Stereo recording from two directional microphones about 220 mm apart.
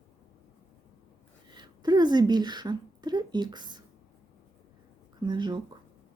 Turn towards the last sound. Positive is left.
turn(degrees=-20)  # may be behind; listen again after turning